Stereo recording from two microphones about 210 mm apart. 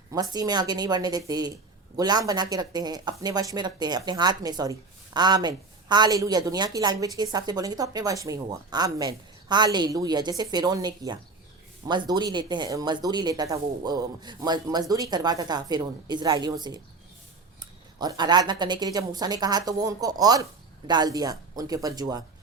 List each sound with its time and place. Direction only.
0.1 s speech: 20° right (ahead or behind)